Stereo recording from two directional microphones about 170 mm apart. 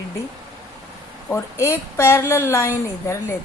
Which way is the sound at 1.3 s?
15° left (ahead or behind).